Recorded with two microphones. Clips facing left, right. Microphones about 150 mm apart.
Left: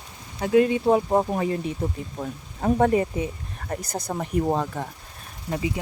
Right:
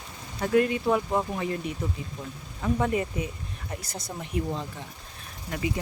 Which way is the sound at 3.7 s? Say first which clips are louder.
Left 8 dB; 50° left (ahead or behind).